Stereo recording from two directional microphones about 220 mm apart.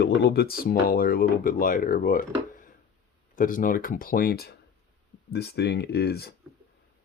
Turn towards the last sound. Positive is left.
turn(degrees=45)  # may be behind; listen again after turning